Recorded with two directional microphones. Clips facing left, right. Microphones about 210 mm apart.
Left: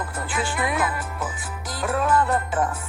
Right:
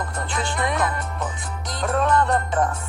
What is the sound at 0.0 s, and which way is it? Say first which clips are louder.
Speech: even; 5° left (ahead or behind).